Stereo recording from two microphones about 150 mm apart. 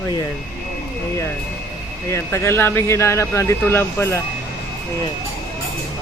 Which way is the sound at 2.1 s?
20° left (ahead or behind).